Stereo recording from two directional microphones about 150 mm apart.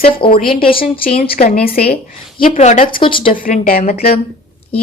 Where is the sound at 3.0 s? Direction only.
35° left (ahead or behind).